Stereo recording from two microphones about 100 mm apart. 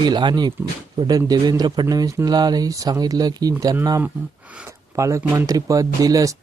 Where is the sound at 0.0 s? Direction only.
50° right (ahead or behind).